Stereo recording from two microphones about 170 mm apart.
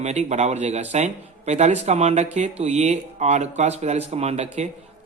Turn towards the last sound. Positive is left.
turn(degrees=-40)  # may be behind; listen again after turning